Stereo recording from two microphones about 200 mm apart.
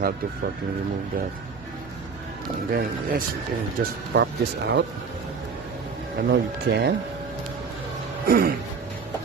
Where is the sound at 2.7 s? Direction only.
45° right (ahead or behind).